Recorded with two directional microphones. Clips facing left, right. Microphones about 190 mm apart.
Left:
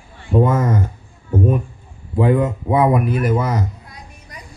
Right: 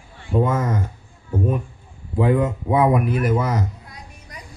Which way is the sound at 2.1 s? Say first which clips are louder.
Left 2 dB; 40° left (ahead or behind).